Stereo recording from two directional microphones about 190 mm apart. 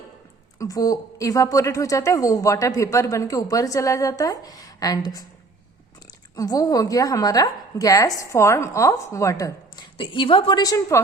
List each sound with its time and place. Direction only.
0.6 s a woman's voice: 20° left (ahead or behind)
6.3 s a woman's voice: 20° left (ahead or behind)